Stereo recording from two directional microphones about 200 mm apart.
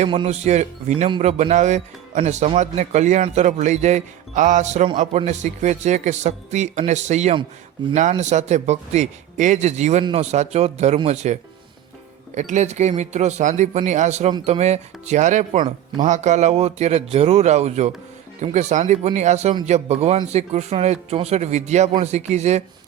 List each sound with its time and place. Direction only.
0.0 s speech: 30° right (ahead or behind)